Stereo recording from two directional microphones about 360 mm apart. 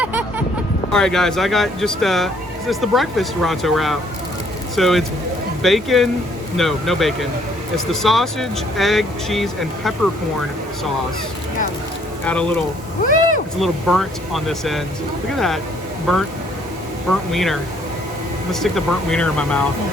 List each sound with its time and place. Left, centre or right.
0.0 s a sound: centre
0.9 s speech: centre
12.2 s speech: centre
13.0 s vehicle: left
13.6 s speech: centre
18.6 s speech: centre